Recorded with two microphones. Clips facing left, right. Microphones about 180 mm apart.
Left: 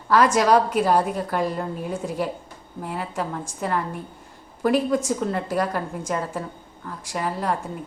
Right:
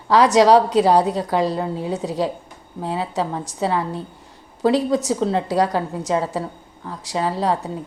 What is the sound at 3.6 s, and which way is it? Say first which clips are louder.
A woman's voice: right 4 dB; 90° right.